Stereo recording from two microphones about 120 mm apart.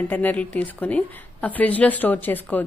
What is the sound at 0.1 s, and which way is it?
A woman's voice, 15° left (ahead or behind).